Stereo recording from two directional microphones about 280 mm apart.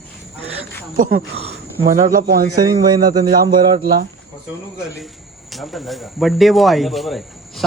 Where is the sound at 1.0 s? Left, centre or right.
Right.